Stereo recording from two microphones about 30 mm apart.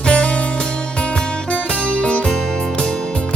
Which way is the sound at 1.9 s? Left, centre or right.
Left.